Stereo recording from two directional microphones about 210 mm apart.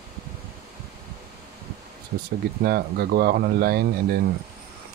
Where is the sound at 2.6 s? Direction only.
50° right (ahead or behind).